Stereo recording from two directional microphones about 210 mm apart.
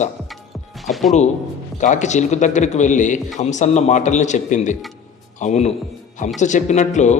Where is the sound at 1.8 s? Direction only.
35° left (ahead or behind).